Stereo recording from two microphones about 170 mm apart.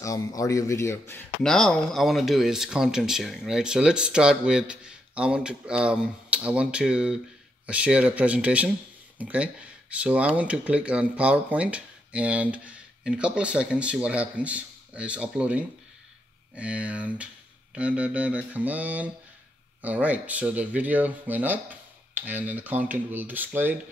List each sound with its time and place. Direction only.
0.0 s speech: 20° left (ahead or behind)
1.4 s speech: 5° left (ahead or behind)